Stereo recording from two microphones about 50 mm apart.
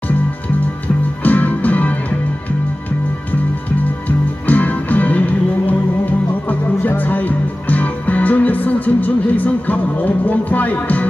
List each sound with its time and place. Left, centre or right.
1.2 s music: left
4.5 s music: left